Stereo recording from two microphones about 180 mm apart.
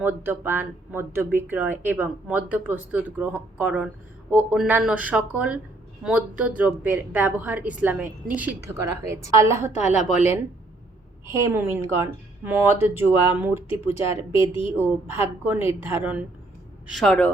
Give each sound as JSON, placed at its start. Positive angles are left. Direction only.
{"t": 0.0, "sound": "speech", "side_deg": -10}
{"t": 9.7, "sound": "a woman's voice", "side_deg": 40}
{"t": 11.3, "sound": "speech", "side_deg": -15}
{"t": 16.8, "sound": "speech", "side_deg": 0}